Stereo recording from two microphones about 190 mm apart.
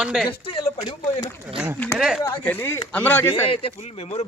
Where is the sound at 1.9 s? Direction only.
15° left (ahead or behind).